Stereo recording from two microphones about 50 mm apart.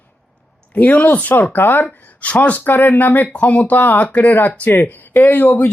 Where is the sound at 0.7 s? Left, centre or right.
Left.